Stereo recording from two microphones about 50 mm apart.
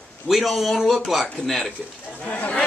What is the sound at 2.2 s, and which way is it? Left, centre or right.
Speech, left.